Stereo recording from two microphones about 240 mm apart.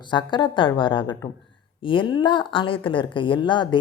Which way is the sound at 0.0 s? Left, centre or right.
Centre.